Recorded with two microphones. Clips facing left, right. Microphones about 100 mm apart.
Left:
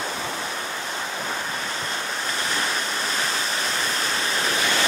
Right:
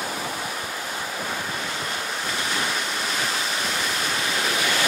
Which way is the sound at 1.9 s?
35° left (ahead or behind).